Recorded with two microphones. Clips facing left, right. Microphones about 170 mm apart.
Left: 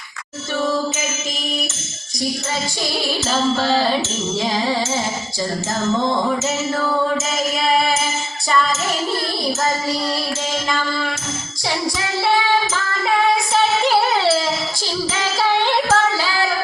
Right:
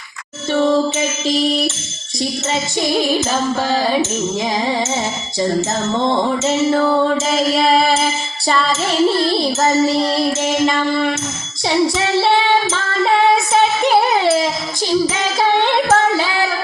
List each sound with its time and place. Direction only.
1.3 s music: 30° right (ahead or behind)
2.9 s music: 15° right (ahead or behind)
5.4 s music: 25° right (ahead or behind)
9.2 s music: 25° right (ahead or behind)
11.7 s child singing: 25° right (ahead or behind)
15.2 s music: 20° right (ahead or behind)